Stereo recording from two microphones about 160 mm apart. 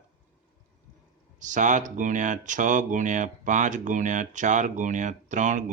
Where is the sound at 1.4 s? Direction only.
50° right (ahead or behind).